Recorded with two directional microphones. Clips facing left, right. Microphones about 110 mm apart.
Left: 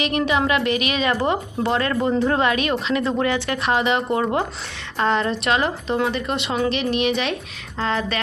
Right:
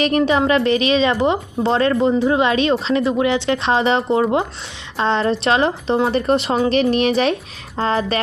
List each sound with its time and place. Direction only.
0.0 s a woman's voice: 35° right (ahead or behind); by 2.5 s 15° right (ahead or behind)
2.5 s a woman's voice: 25° right (ahead or behind)
3.0 s a woman's voice: 15° right (ahead or behind); by 8.2 s 35° right (ahead or behind)